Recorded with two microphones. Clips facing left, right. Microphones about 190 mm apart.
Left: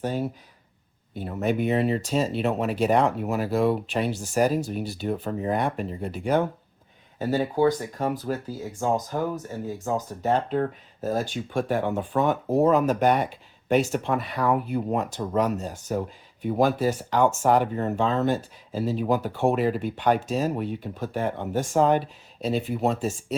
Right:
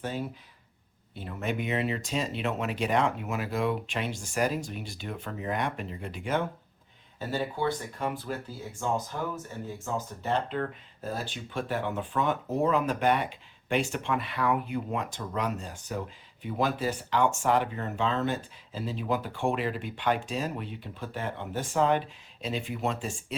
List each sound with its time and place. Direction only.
0.0 s speech: 45° left (ahead or behind)